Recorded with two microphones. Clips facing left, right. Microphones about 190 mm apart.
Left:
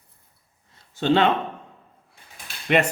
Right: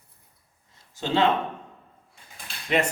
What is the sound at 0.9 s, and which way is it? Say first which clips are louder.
Speech: left 4 dB; 65° left (ahead or behind).